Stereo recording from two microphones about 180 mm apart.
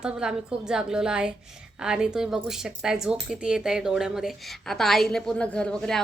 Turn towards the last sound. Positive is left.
turn(degrees=5)  # may be behind; listen again after turning